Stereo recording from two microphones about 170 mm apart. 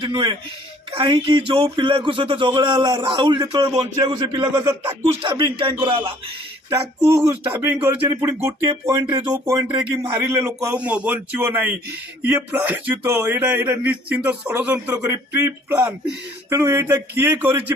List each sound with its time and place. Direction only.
0.0 s speech: 25° right (ahead or behind)
5.2 s speech: 30° right (ahead or behind)
6.7 s speech: 15° right (ahead or behind)